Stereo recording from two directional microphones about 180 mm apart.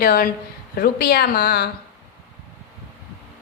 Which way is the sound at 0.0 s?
55° left (ahead or behind).